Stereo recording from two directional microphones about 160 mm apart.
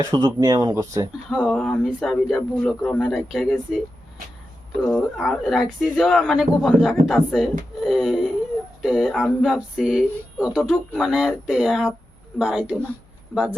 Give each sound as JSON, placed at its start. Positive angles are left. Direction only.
{"t": 0.0, "sound": "speech", "side_deg": -20}
{"t": 1.3, "sound": "speech", "side_deg": 0}
{"t": 4.9, "sound": "speech", "side_deg": 0}